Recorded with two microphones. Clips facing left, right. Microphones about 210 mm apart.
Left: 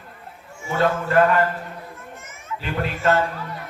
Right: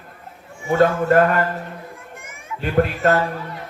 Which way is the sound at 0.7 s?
45° right (ahead or behind).